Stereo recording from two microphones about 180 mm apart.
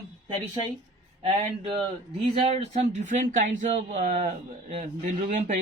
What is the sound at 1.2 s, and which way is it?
Speech, 35° right (ahead or behind).